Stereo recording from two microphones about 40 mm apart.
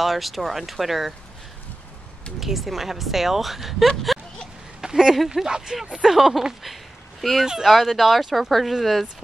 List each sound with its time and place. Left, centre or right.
0.0 s speech: centre
2.4 s speech: centre
4.8 s a sound: centre
5.3 s speech: centre
6.6 s a sound: centre
7.4 s speech: centre
7.7 s speech: centre